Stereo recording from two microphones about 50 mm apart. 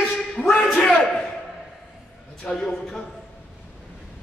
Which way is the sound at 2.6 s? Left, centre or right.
Centre.